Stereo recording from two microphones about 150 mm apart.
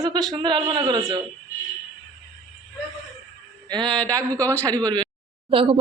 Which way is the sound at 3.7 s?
30° right (ahead or behind).